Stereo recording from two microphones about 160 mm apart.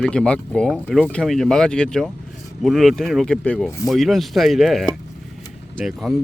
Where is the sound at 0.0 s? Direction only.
5° left (ahead or behind).